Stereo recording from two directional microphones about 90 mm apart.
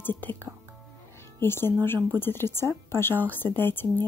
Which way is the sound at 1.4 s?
25° left (ahead or behind).